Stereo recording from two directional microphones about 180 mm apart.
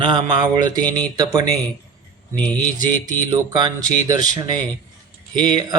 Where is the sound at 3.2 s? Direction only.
25° right (ahead or behind).